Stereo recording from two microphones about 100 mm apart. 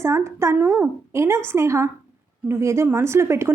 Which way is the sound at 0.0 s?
30° right (ahead or behind).